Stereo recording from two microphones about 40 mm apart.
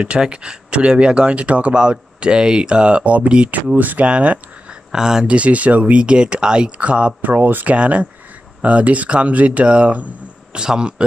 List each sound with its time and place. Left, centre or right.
0.0 s speech: right
3.7 s speech: right
4.0 s speech: right
4.9 s speech: centre
5.2 s speech: right
7.2 s speech: right
7.7 s speech: right
10.5 s speech: right